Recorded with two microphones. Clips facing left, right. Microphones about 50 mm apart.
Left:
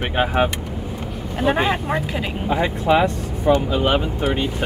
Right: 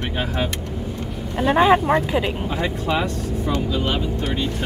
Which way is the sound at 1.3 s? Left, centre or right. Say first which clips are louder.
Right 4 dB; centre.